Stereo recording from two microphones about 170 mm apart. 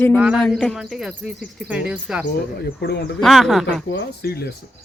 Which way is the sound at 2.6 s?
75° left (ahead or behind).